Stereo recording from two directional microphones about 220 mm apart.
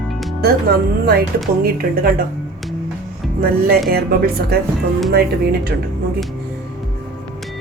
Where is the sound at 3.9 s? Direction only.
45° right (ahead or behind).